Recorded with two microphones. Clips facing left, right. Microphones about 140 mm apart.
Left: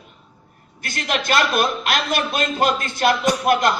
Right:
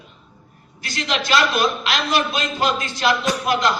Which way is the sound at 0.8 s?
55° left (ahead or behind).